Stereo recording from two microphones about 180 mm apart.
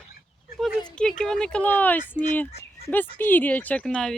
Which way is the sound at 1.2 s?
5° left (ahead or behind).